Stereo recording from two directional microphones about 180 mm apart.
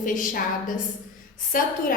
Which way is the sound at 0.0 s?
45° left (ahead or behind).